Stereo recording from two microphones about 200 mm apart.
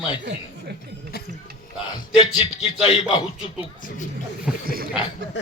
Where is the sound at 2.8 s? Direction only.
20° left (ahead or behind).